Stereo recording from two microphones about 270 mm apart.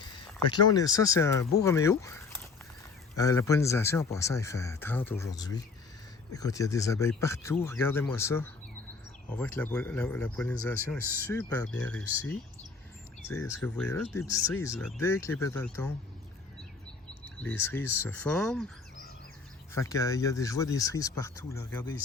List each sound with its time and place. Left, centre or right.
0.5 s speech: centre
17.1 s speech: centre
19.7 s speech: centre